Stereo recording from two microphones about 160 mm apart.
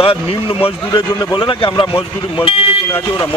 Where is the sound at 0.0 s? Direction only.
35° left (ahead or behind).